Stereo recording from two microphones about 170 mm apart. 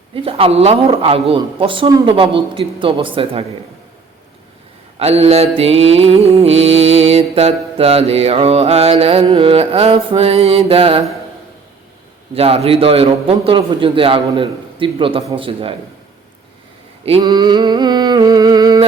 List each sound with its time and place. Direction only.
0.1 s mantra: 35° right (ahead or behind)
4.9 s mantra: 35° right (ahead or behind)
12.3 s mantra: 35° right (ahead or behind)
17.1 s a sound: 30° right (ahead or behind)